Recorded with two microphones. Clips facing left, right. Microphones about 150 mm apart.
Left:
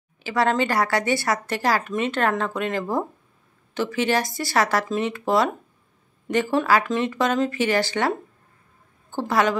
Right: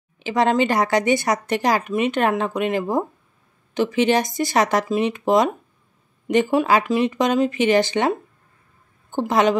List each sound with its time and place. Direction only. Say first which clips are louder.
0.2 s speech: right 3 dB; 20° right (ahead or behind)